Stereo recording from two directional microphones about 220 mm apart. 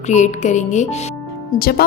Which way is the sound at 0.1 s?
30° left (ahead or behind).